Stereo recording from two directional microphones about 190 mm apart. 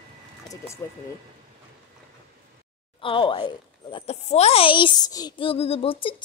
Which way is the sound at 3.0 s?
25° left (ahead or behind).